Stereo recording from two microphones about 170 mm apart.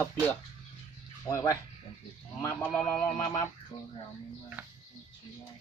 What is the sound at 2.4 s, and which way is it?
Speech, 10° left (ahead or behind).